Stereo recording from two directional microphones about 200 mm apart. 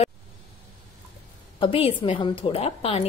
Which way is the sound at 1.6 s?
25° left (ahead or behind).